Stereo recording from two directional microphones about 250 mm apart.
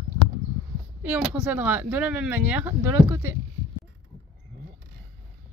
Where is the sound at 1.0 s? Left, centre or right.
Centre.